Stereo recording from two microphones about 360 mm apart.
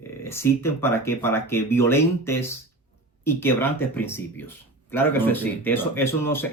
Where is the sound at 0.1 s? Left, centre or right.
Centre.